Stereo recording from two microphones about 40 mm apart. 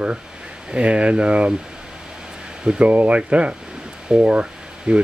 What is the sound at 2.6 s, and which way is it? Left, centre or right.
Speech, right.